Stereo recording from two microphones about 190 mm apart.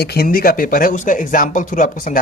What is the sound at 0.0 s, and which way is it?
Speech, 55° left (ahead or behind).